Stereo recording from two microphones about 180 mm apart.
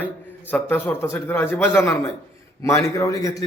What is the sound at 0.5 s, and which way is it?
A man's voice, 10° left (ahead or behind).